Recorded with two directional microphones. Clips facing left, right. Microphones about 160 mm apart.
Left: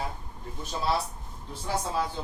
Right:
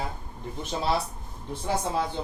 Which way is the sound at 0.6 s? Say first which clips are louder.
Right 2 dB; 25° right (ahead or behind).